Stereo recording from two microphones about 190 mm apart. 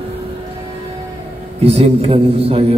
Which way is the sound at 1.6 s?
30° right (ahead or behind).